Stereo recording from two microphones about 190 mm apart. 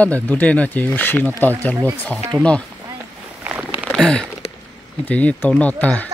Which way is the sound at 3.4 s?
5° right (ahead or behind).